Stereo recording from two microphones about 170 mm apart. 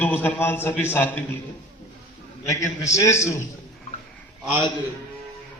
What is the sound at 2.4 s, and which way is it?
Speech, 20° left (ahead or behind).